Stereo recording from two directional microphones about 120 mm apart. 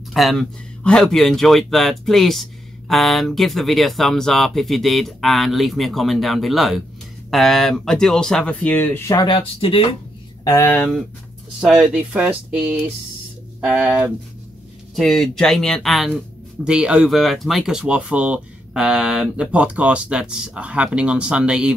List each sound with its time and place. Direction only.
0.1 s speech: centre (ahead or behind); by 9.3 s 25° left (ahead or behind)
9.3 s speech: 45° left (ahead or behind)
10.6 s speech: 15° left (ahead or behind)
11.6 s speech: 5° right (ahead or behind)
15.0 s speech: 5° left (ahead or behind)